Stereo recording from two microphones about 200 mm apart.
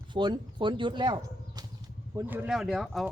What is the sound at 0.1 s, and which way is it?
Speech, 25° right (ahead or behind).